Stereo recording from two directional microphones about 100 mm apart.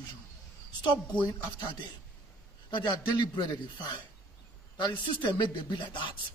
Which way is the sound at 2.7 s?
50° left (ahead or behind).